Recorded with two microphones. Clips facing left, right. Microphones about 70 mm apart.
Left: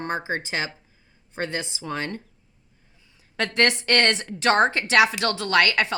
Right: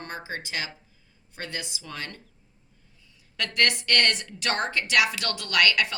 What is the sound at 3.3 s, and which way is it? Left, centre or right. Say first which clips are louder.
Speech: left 4 dB; left.